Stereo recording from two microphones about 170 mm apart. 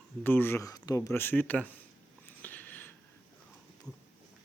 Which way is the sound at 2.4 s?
10° left (ahead or behind).